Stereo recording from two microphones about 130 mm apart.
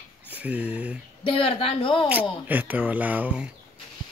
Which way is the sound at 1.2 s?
45° left (ahead or behind).